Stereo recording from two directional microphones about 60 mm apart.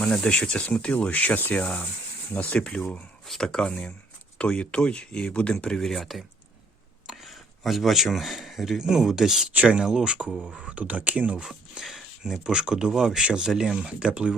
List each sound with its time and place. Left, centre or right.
0.0 s speech: centre
3.2 s speech: centre; by 11.4 s right
11.4 s speech: centre